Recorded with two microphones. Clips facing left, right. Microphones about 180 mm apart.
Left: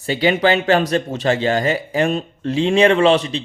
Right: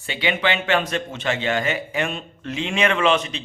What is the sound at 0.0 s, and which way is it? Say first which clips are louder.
Speech: left 7 dB; 40° left (ahead or behind).